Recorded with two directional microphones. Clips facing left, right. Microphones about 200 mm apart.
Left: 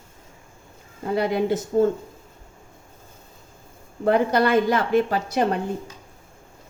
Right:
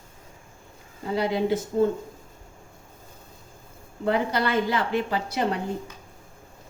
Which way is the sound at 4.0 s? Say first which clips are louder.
Left 5 dB; 50° left (ahead or behind).